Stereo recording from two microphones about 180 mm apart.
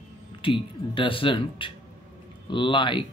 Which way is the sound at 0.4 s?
30° left (ahead or behind).